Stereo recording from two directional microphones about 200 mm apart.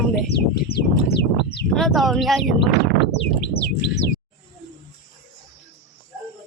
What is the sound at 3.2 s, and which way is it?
Bird, 55° left (ahead or behind).